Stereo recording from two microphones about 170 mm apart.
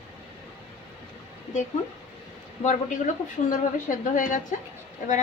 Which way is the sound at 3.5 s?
50° left (ahead or behind).